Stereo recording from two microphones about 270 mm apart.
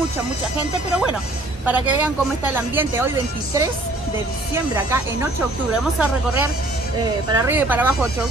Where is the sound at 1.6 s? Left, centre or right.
Centre.